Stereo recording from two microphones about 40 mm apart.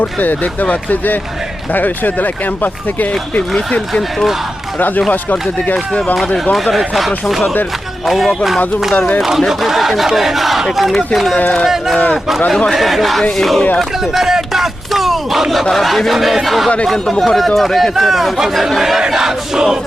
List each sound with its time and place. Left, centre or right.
0.0 s speech: left
3.7 s speech: centre
4.8 s speech: left
6.3 s speech: centre
9.0 s speech: left
9.5 s speech: centre
12.7 s speech: centre
13.7 s a sound: centre
15.7 s speech: centre
16.8 s speech: centre
19.0 s battle cry: centre